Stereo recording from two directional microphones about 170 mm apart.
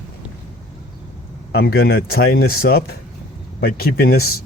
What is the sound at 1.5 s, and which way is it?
Speech, 65° left (ahead or behind).